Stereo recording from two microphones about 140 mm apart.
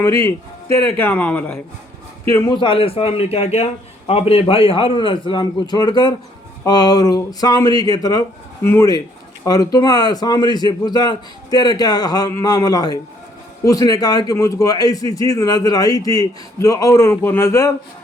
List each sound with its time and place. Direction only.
0.3 s a man's voice: 20° left (ahead or behind)
2.6 s a man's voice: 40° left (ahead or behind); by 17.7 s 20° left (ahead or behind)